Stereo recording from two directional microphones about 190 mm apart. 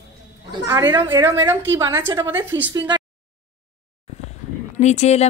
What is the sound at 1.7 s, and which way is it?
A woman's voice, 10° right (ahead or behind).